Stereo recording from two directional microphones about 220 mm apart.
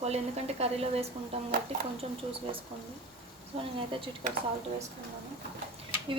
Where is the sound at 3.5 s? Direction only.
30° right (ahead or behind).